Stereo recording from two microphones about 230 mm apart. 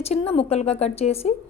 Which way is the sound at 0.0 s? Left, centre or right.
Left.